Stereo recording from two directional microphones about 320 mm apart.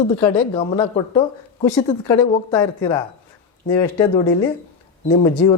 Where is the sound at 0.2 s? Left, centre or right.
Centre.